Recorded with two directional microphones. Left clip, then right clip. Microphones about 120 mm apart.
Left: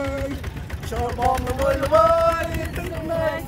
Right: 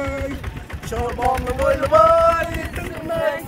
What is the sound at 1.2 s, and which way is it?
Speech, 60° right (ahead or behind).